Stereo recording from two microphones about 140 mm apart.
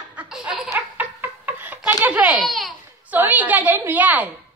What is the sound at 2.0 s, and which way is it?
Speech, 10° right (ahead or behind).